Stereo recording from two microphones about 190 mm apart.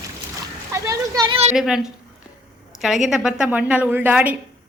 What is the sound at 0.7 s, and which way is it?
Speech, 15° right (ahead or behind).